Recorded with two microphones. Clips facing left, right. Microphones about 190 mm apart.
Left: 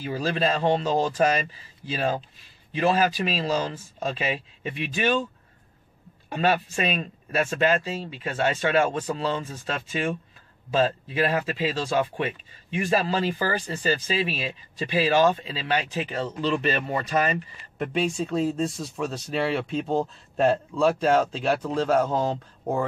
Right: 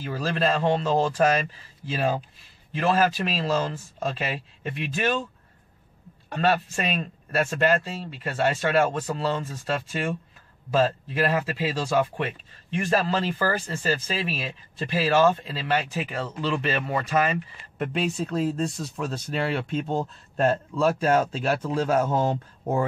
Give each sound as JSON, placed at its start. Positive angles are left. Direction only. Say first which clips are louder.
{"t": 0.0, "sound": "speech", "louder": "even", "side_deg": 5}
{"t": 6.3, "sound": "speech", "louder": "even", "side_deg": 5}